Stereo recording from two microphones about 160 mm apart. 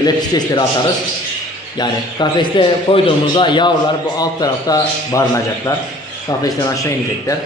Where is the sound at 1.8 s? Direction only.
25° left (ahead or behind).